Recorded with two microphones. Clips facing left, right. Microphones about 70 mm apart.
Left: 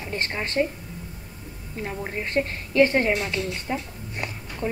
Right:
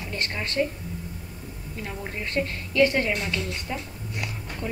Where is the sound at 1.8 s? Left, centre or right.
Left.